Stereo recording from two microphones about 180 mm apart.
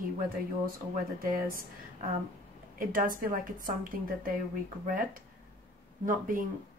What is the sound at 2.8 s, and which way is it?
Speech, 50° right (ahead or behind).